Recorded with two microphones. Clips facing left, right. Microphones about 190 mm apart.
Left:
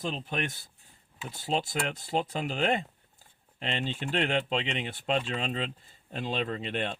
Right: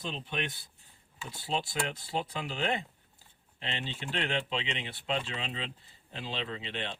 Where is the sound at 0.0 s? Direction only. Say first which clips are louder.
Left 4 dB; 45° left (ahead or behind).